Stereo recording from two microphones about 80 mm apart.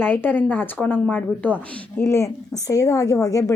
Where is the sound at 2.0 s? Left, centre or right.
Left.